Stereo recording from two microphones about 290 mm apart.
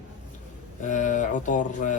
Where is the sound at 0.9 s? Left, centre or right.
Left.